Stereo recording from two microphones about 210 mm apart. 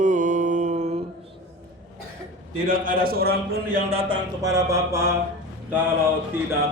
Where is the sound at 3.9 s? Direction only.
20° right (ahead or behind).